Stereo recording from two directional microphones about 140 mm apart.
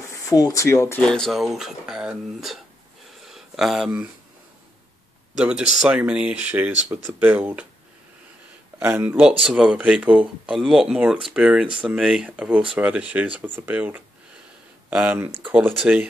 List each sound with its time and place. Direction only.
0.1 s speech: 25° left (ahead or behind)
1.0 s speech: 5° left (ahead or behind)
3.3 s a sound: centre (ahead or behind)
5.8 s speech: 10° right (ahead or behind)
8.7 s speech: 15° right (ahead or behind)